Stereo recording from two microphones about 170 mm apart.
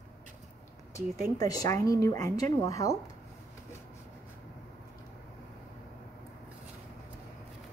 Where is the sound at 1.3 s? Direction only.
20° left (ahead or behind).